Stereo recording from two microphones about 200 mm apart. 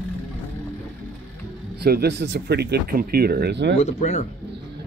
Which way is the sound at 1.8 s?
55° right (ahead or behind).